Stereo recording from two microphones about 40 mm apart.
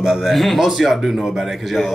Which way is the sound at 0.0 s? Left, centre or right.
Centre.